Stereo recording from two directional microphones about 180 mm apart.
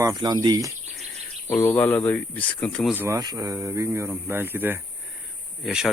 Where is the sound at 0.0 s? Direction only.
20° right (ahead or behind).